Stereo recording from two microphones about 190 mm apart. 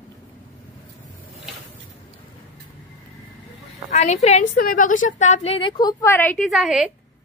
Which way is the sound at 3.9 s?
35° left (ahead or behind).